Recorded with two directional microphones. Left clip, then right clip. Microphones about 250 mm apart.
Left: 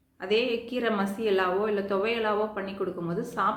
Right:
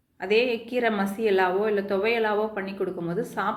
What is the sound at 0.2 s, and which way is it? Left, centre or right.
A woman's voice, centre.